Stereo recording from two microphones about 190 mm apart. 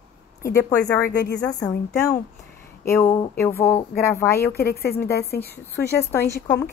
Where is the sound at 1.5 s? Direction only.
20° left (ahead or behind).